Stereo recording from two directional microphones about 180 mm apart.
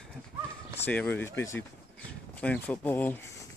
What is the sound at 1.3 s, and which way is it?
Speech, 90° left.